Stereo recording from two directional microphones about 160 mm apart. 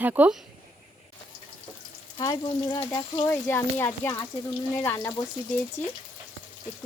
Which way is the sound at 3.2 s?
15° left (ahead or behind).